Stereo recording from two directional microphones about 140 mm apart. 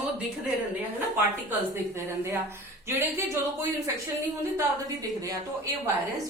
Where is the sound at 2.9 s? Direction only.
15° right (ahead or behind).